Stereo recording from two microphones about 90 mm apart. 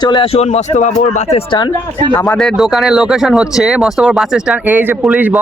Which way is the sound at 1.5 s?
60° left (ahead or behind).